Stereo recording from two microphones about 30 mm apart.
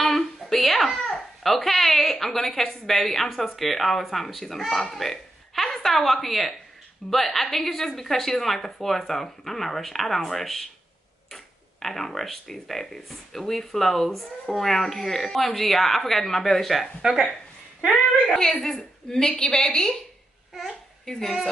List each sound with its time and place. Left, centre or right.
0.0 s babbling: centre
3.5 s a woman's voice: centre
17.0 s speech: right
18.3 s a woman's voice: centre
21.0 s speech: centre